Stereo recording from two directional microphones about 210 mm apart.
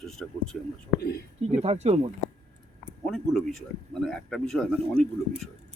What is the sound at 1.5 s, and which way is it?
Speech, 30° right (ahead or behind).